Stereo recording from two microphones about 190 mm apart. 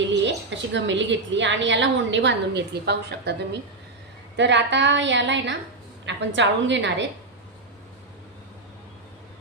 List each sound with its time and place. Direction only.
0.1 s a woman's voice: 70° right (ahead or behind)